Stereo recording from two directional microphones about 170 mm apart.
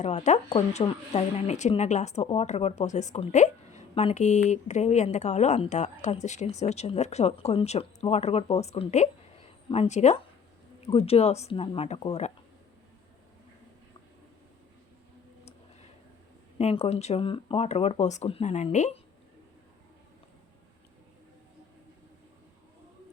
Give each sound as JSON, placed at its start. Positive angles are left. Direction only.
{"t": 0.0, "sound": "speech", "side_deg": 45}
{"t": 16.6, "sound": "speech", "side_deg": 40}